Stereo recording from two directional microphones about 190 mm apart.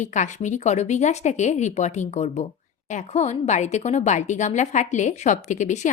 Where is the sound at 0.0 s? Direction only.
40° left (ahead or behind).